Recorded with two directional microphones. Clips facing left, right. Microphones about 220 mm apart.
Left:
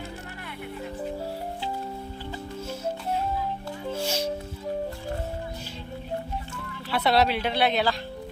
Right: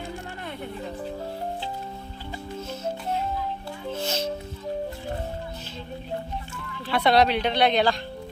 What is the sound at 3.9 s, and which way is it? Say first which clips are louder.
Music: even; 10° left (ahead or behind).